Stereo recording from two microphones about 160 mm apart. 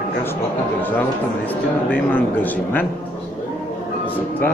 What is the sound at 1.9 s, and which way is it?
Speech, 10° left (ahead or behind).